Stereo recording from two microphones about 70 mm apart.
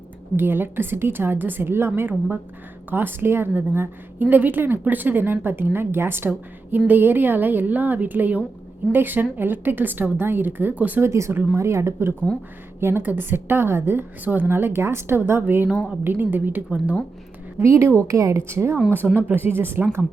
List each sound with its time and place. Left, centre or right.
0.3 s a woman's voice: right
11.0 s a woman's voice: right
17.6 s a woman's voice: right